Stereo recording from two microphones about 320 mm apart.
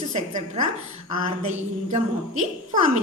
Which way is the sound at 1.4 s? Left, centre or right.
Right.